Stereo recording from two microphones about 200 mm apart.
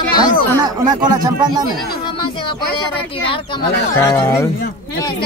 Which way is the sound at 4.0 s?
10° left (ahead or behind).